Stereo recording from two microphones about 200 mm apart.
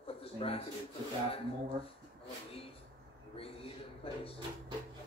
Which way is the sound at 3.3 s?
30° left (ahead or behind).